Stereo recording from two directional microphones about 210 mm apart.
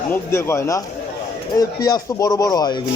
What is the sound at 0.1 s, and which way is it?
Speech, 10° left (ahead or behind).